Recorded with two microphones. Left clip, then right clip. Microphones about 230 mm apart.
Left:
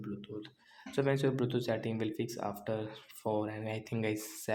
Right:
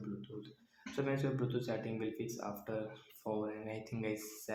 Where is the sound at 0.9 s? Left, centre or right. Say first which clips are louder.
Left 6 dB; left.